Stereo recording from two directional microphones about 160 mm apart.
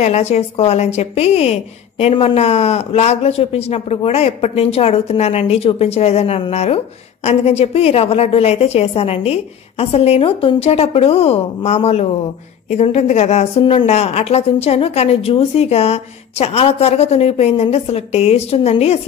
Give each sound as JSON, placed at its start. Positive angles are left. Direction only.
{"t": 0.0, "sound": "a woman's voice", "side_deg": 45}